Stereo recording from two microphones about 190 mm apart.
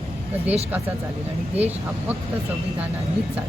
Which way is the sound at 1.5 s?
10° right (ahead or behind).